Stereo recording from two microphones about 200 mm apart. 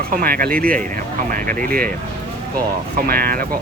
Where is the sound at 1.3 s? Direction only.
45° right (ahead or behind).